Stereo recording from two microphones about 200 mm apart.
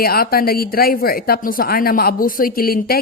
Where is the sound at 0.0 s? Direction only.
50° left (ahead or behind).